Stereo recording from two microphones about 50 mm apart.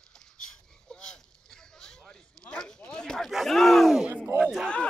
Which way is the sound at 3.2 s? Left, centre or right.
Centre.